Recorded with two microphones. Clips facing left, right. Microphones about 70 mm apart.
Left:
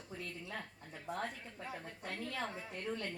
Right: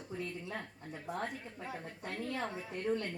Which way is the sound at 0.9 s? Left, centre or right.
Centre.